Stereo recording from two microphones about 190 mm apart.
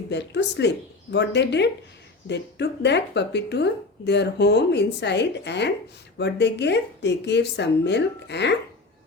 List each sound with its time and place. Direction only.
0.1 s speech: 65° left (ahead or behind)